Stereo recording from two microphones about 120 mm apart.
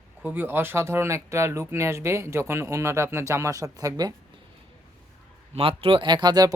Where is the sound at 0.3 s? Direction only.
15° right (ahead or behind).